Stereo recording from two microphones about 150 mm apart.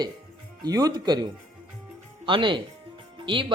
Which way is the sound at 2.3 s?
35° right (ahead or behind).